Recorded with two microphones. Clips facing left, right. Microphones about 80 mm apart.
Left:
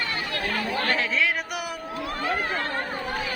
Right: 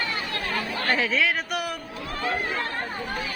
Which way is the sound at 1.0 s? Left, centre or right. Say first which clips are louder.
Right 1 dB; centre.